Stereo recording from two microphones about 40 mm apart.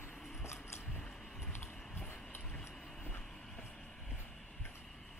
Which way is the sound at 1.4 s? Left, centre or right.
Left.